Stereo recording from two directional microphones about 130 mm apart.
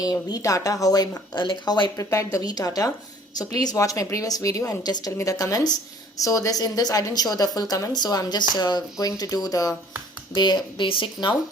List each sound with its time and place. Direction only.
0.0 s a woman's voice: 30° left (ahead or behind)